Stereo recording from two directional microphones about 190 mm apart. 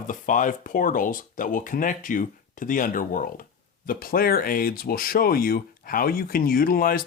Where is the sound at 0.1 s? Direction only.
45° left (ahead or behind).